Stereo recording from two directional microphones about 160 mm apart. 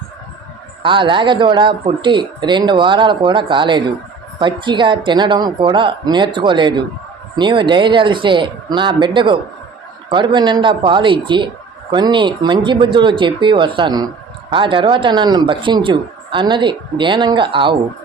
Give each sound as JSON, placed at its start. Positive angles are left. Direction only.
{"t": 0.8, "sound": "a man's voice", "side_deg": -30}